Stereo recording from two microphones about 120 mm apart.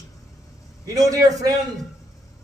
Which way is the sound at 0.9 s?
30° right (ahead or behind).